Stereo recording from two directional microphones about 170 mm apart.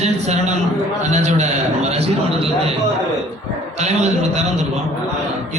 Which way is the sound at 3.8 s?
40° right (ahead or behind).